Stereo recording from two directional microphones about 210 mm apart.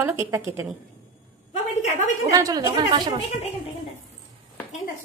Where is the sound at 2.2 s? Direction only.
15° right (ahead or behind).